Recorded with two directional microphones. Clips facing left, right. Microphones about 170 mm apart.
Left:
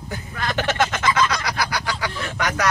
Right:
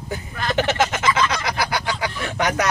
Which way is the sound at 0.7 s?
20° right (ahead or behind).